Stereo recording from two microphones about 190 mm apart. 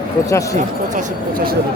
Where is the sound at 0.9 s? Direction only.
50° right (ahead or behind).